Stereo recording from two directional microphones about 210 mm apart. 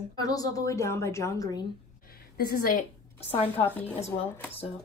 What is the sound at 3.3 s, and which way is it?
Speech, 30° left (ahead or behind).